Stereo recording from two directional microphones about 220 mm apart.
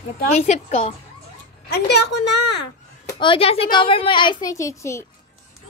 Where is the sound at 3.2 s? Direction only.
25° left (ahead or behind).